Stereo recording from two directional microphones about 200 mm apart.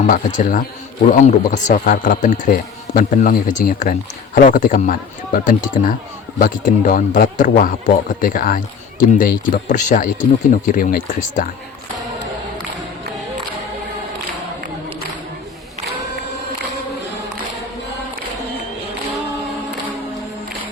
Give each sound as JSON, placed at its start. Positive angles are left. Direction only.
{"t": 0.0, "sound": "speech", "side_deg": 40}